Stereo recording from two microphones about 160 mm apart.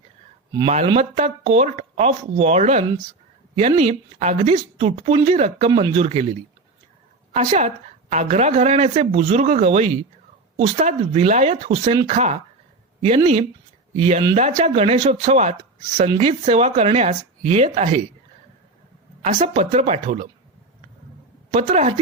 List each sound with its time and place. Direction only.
0.9 s speech: 40° right (ahead or behind)
7.3 s speech: 45° right (ahead or behind)
19.2 s speech: 50° right (ahead or behind)
21.5 s speech: 45° right (ahead or behind)